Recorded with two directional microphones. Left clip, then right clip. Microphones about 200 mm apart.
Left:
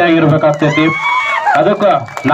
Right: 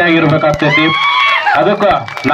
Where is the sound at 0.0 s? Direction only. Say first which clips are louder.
Even; 50° left (ahead or behind).